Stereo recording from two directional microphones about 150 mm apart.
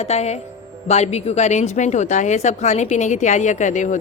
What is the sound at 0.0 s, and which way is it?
Speech, 45° left (ahead or behind).